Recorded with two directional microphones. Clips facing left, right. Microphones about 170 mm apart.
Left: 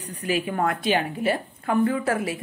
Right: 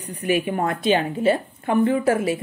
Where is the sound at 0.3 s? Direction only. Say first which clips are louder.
Right 3 dB; 25° right (ahead or behind).